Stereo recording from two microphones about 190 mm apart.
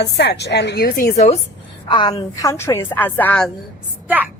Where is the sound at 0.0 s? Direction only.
60° left (ahead or behind).